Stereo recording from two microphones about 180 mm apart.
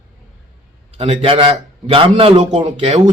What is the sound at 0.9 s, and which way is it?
A man's voice, 30° right (ahead or behind).